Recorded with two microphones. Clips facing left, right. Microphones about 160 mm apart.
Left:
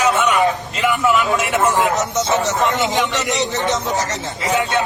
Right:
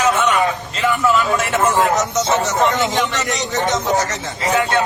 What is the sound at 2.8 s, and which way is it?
Speech, centre (ahead or behind).